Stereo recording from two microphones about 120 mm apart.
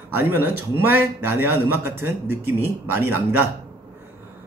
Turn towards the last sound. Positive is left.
turn(degrees=-20)  # may be behind; listen again after turning